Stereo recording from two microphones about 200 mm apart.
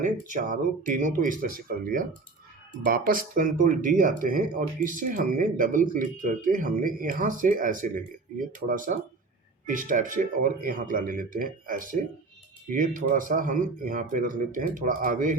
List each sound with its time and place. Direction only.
0.0 s speech: 40° right (ahead or behind)